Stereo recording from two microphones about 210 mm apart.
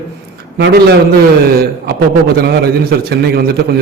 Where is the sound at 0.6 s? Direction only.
50° right (ahead or behind).